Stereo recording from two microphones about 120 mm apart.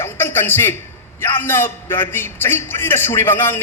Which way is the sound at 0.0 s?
20° left (ahead or behind).